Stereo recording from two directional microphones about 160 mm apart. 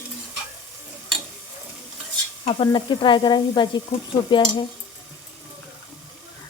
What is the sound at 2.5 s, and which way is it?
Speech, 30° left (ahead or behind).